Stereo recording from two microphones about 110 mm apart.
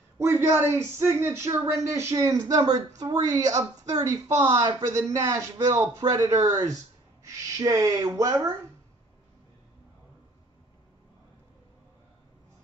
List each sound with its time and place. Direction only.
0.2 s speech: 20° right (ahead or behind)